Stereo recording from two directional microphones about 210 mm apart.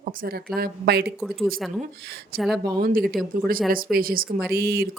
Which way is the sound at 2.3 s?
45° right (ahead or behind).